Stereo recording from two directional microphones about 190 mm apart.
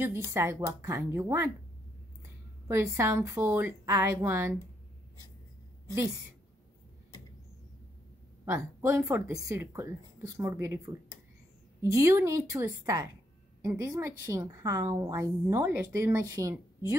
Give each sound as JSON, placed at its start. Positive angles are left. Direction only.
{"t": 0.0, "sound": "a woman's voice", "side_deg": -15}
{"t": 2.7, "sound": "a woman's voice", "side_deg": -15}
{"t": 8.5, "sound": "a woman's voice", "side_deg": -15}
{"t": 11.8, "sound": "a woman's voice", "side_deg": -15}